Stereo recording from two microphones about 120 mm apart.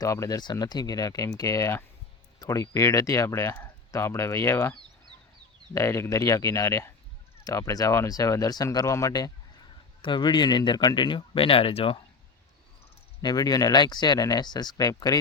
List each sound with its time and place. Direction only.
0.0 s speech: 30° left (ahead or behind)
5.7 s speech: 25° left (ahead or behind)
10.0 s speech: 40° left (ahead or behind)
13.2 s speech: 35° left (ahead or behind)